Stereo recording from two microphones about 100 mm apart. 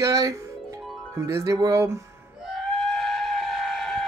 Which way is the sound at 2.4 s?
Centre (ahead or behind).